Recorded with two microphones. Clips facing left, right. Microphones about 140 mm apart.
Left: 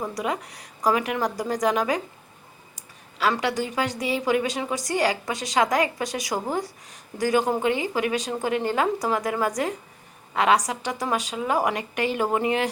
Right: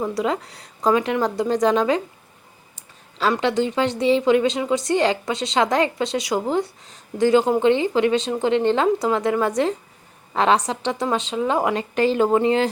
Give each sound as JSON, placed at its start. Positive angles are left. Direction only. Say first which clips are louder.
{"t": 0.1, "sound": "a woman's voice", "louder": "right 5 dB", "side_deg": -25}